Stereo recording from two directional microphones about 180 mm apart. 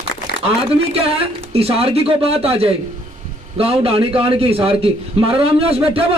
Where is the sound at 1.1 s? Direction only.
30° right (ahead or behind).